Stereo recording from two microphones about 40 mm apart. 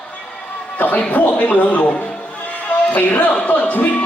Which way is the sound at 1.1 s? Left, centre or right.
Left.